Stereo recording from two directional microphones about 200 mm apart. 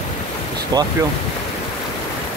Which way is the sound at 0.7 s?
20° right (ahead or behind).